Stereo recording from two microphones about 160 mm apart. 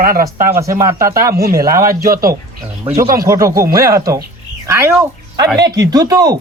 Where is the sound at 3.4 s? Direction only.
20° right (ahead or behind).